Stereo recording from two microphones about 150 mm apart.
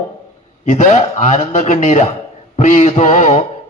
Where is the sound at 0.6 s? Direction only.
55° left (ahead or behind).